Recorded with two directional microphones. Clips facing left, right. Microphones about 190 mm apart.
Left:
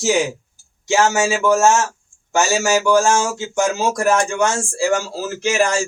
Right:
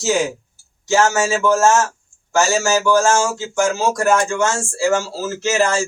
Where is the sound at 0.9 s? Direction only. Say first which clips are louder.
Even; 15° left (ahead or behind).